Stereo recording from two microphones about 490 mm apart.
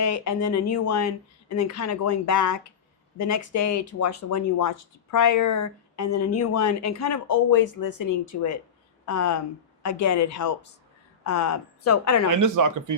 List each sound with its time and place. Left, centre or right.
0.0 s speech: left
12.3 s speech: right